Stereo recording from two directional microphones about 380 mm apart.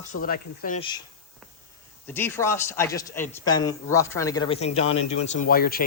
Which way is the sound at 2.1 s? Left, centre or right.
Centre.